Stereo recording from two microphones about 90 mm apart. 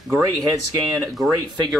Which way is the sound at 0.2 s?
40° right (ahead or behind).